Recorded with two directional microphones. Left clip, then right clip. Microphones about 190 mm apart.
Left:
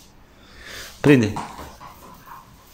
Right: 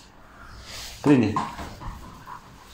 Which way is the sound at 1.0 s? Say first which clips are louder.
Left 4 dB; 55° left (ahead or behind).